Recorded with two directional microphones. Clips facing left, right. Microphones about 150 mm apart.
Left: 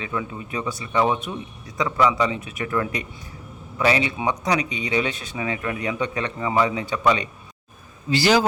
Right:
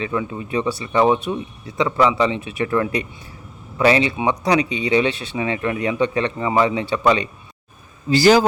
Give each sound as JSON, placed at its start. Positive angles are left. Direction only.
{"t": 0.0, "sound": "speech", "side_deg": -30}
{"t": 8.1, "sound": "a man's voice", "side_deg": -45}